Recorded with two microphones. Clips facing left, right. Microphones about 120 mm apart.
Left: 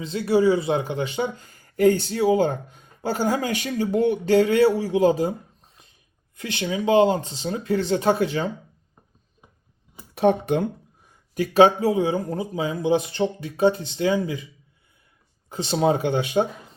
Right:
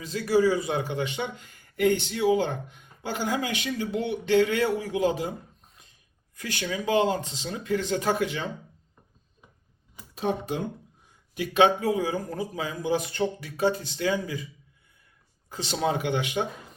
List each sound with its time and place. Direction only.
0.0 s speech: 25° left (ahead or behind)
6.3 s speech: 25° left (ahead or behind)
10.2 s speech: 65° left (ahead or behind)
11.3 s speech: 35° left (ahead or behind)
15.4 s speech: 30° left (ahead or behind)